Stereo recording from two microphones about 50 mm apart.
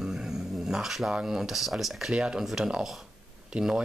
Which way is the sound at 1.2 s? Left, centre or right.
Centre.